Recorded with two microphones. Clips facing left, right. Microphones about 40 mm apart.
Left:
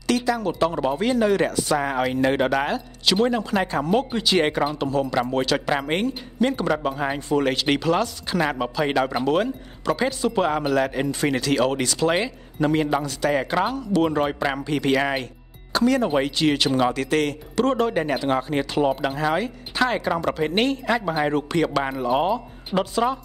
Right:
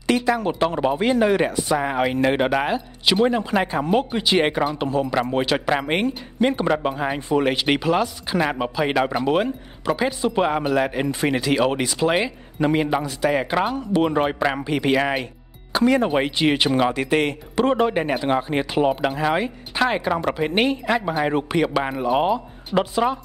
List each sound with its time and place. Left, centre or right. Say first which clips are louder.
0.0 s speech: right 2 dB; right
15.7 s speech: right 1 dB; right